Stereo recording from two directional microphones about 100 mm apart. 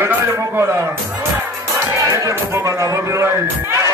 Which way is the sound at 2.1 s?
30° right (ahead or behind).